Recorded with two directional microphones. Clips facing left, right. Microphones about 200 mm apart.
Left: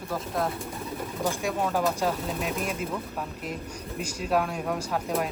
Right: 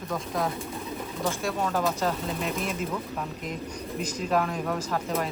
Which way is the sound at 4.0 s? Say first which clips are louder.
Even; 10° left (ahead or behind).